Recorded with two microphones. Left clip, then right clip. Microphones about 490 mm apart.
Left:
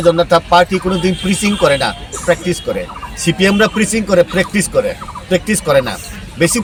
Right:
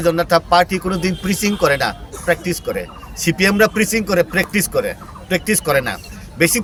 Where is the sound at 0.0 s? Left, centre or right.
Right.